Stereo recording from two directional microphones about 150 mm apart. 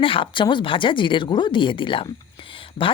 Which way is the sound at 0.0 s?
35° left (ahead or behind).